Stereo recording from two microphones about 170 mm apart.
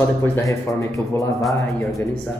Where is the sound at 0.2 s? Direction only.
15° left (ahead or behind).